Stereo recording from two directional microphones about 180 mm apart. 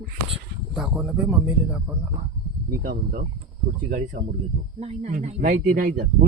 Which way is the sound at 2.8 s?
55° right (ahead or behind).